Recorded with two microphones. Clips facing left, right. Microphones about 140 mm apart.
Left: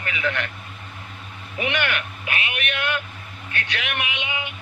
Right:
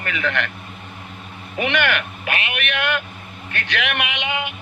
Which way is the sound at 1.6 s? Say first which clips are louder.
Right 4 dB; 80° right.